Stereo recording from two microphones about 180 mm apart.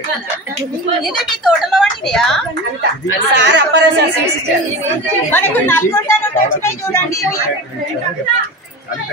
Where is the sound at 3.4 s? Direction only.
75° right (ahead or behind).